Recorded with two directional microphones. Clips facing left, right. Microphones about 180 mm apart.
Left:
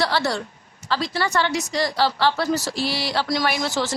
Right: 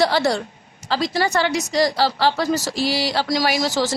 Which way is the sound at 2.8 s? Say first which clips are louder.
Right 4 dB; 90° right.